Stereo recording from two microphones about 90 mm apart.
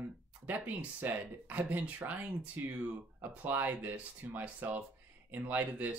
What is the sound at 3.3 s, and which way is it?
Speech, 20° right (ahead or behind).